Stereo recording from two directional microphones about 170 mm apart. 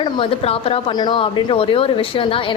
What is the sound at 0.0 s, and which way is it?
A woman's voice, 35° left (ahead or behind).